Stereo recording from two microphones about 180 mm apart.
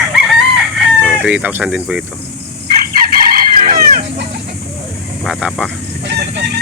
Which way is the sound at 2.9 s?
55° right (ahead or behind).